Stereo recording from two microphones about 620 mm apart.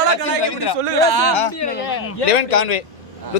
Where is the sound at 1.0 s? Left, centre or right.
Right.